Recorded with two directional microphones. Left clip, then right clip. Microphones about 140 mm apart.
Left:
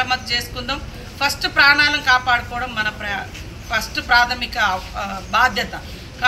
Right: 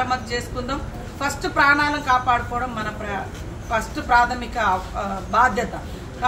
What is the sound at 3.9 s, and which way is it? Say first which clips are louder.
Speech: left 2 dB; 20° right (ahead or behind).